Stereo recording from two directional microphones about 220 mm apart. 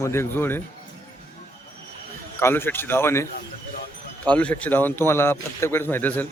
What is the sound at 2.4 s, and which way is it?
Speech, 10° left (ahead or behind).